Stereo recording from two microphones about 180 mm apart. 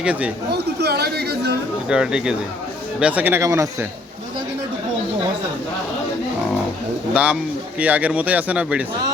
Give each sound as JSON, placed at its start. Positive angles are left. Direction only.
{"t": 0.0, "sound": "speech", "side_deg": -5}
{"t": 0.5, "sound": "chatter", "side_deg": -65}
{"t": 1.9, "sound": "speech", "side_deg": -5}
{"t": 7.1, "sound": "speech", "side_deg": -5}